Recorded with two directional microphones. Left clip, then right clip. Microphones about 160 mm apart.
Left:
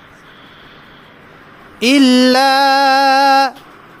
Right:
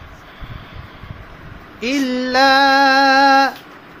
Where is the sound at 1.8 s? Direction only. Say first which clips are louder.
Left 9 dB; 90° left.